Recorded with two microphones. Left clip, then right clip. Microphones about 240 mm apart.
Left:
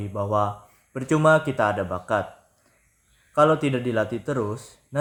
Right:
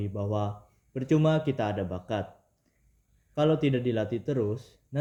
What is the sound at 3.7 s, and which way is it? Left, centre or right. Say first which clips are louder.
Speech: left 4 dB; left.